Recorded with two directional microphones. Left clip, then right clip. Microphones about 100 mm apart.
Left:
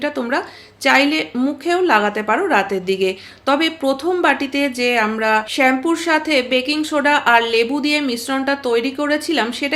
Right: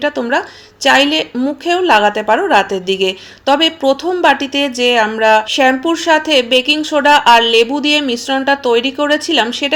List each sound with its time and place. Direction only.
0.0 s a woman's voice: 15° right (ahead or behind)